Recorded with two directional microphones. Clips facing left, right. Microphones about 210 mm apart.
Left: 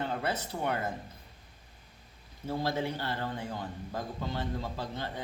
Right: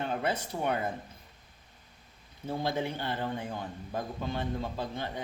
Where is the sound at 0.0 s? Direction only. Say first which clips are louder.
Right 2 dB; 15° right (ahead or behind).